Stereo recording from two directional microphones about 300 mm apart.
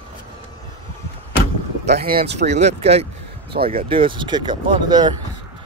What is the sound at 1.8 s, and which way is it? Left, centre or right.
Speech, right.